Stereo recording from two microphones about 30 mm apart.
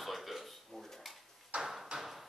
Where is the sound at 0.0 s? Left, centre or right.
Centre.